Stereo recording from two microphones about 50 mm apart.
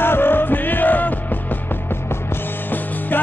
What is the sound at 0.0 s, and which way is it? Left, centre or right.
Music, left.